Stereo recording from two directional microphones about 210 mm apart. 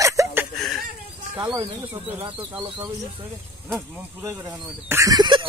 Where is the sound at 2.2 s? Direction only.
25° right (ahead or behind).